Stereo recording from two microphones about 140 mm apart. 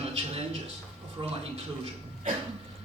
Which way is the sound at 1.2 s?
40° right (ahead or behind).